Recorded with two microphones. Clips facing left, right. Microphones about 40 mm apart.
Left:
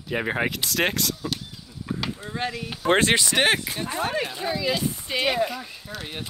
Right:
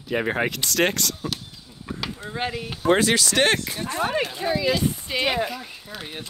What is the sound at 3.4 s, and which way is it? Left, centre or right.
Speech, centre.